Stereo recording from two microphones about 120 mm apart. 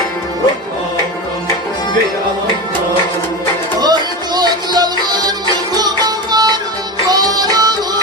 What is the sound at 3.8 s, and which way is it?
Music, 35° right (ahead or behind).